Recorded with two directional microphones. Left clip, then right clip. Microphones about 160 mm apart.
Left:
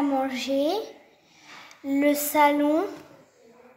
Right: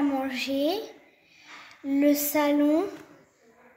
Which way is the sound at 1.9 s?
10° right (ahead or behind).